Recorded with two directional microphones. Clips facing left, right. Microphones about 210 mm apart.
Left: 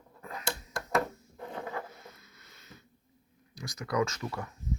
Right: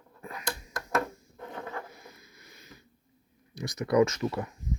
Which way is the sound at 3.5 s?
20° right (ahead or behind).